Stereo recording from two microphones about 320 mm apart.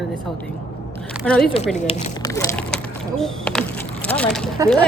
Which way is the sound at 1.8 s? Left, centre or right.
Centre.